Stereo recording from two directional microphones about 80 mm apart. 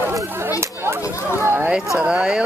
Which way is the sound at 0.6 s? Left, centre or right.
Right.